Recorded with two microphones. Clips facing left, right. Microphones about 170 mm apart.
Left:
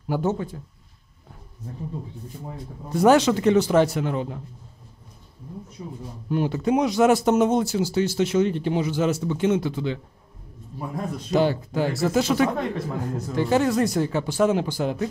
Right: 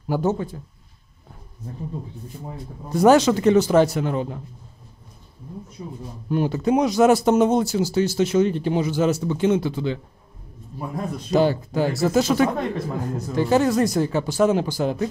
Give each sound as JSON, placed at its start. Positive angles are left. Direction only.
{"t": 0.1, "sound": "speech", "side_deg": -35}
{"t": 2.9, "sound": "speech", "side_deg": -40}
{"t": 6.3, "sound": "speech", "side_deg": -40}
{"t": 11.3, "sound": "speech", "side_deg": -40}